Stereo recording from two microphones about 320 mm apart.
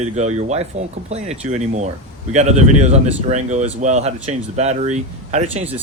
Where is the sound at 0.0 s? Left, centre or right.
Right.